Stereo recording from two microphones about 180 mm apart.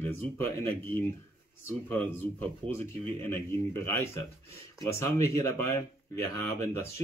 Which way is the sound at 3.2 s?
10° left (ahead or behind).